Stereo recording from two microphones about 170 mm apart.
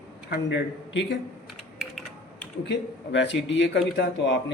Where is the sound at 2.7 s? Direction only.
90° left.